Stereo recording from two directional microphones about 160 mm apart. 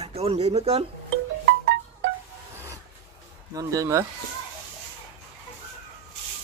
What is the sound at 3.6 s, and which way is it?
Speech, 20° right (ahead or behind).